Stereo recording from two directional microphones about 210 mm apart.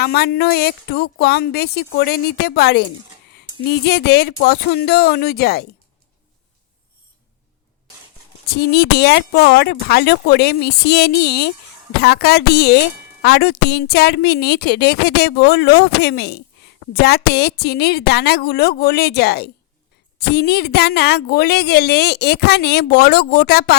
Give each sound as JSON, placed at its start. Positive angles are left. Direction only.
{"t": 0.0, "sound": "a woman's voice", "side_deg": 50}
{"t": 8.4, "sound": "a woman's voice", "side_deg": 50}